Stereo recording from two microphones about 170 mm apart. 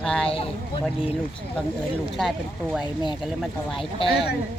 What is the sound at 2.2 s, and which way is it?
Speech, centre (ahead or behind).